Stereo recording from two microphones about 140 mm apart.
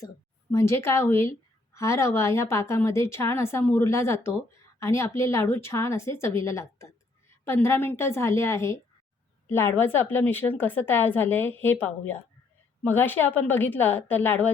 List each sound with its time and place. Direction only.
0.5 s a woman's voice: 20° left (ahead or behind)